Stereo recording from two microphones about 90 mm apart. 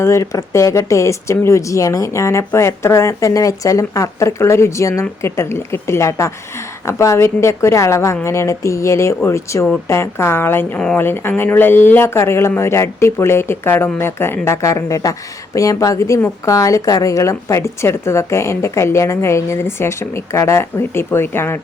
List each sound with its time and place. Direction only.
0.0 s speech: 30° left (ahead or behind)